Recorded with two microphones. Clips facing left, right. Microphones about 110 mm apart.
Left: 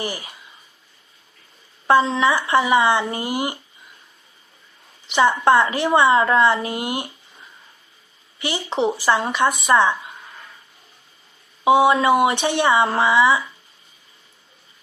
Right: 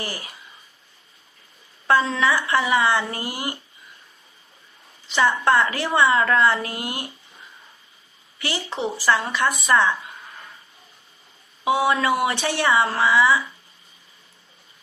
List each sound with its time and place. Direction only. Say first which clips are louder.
1.9 s a woman's voice: left 3 dB; 20° left (ahead or behind)
5.0 s a woman's voice: left 3 dB; 20° left (ahead or behind)
8.4 s a woman's voice: left 5 dB; 20° left (ahead or behind)
11.6 s a woman's voice: left 5 dB; 20° left (ahead or behind)